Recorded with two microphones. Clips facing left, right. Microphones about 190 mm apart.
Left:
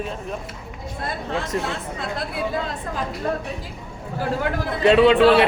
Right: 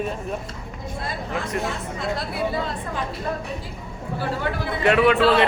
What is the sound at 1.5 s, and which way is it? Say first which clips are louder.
Speech: even; 30° left (ahead or behind).